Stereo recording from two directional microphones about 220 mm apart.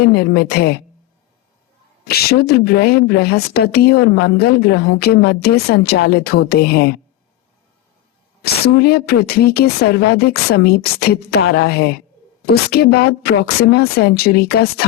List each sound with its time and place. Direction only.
0.0 s a woman's voice: 45° left (ahead or behind)
2.0 s a woman's voice: 45° left (ahead or behind)
8.4 s a woman's voice: 45° left (ahead or behind)